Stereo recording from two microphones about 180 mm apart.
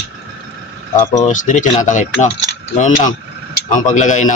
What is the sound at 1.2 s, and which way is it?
Speech, 45° left (ahead or behind).